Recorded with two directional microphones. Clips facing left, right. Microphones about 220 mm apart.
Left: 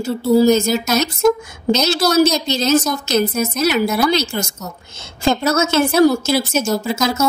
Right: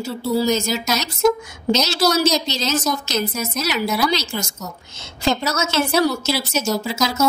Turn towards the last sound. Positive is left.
turn(degrees=55)  # may be behind; listen again after turning